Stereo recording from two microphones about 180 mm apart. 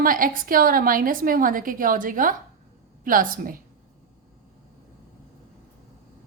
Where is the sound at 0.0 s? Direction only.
50° right (ahead or behind).